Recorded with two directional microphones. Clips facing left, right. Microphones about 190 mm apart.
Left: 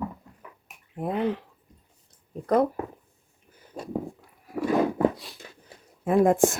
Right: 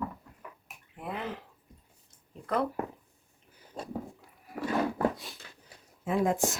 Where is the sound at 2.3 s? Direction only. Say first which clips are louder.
Left 8 dB; 45° left (ahead or behind).